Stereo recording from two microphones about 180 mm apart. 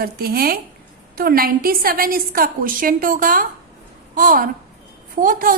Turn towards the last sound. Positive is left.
turn(degrees=-50)  # may be behind; listen again after turning